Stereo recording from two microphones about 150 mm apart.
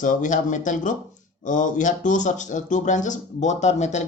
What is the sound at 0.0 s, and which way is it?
Speech, 55° left (ahead or behind).